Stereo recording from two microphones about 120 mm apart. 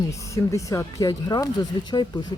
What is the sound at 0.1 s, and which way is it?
Speech, 25° left (ahead or behind).